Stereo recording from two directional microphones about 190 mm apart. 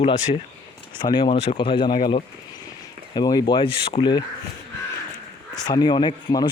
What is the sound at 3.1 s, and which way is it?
Speech, 20° left (ahead or behind).